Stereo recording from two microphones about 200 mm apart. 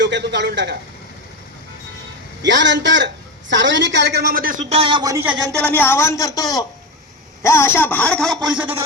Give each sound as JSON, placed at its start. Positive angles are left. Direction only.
{"t": 0.0, "sound": "a man's voice", "side_deg": -60}
{"t": 2.4, "sound": "a woman's voice", "side_deg": -65}
{"t": 4.7, "sound": "a man's voice", "side_deg": -25}
{"t": 5.2, "sound": "speech", "side_deg": -5}
{"t": 5.6, "sound": "a woman's voice", "side_deg": 10}